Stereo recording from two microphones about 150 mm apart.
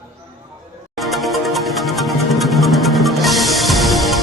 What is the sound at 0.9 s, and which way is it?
Music, centre (ahead or behind).